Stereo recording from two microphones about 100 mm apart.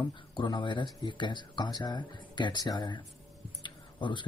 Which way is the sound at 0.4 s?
50° left (ahead or behind).